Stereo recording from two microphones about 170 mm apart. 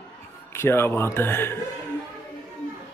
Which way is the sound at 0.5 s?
15° left (ahead or behind).